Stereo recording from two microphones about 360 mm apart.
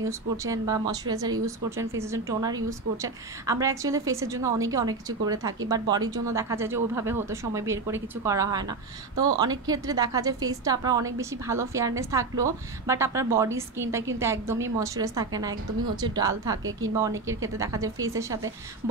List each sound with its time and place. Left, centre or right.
0.0 s a woman's voice: centre